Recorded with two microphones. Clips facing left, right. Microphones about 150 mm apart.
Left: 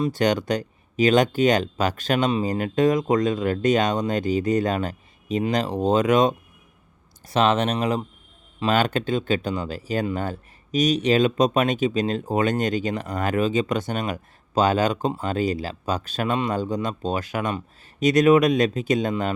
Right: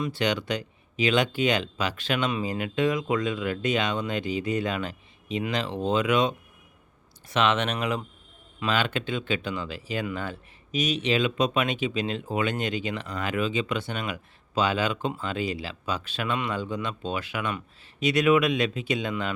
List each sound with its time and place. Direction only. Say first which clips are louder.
0.0 s speech: left 6 dB; 45° left (ahead or behind)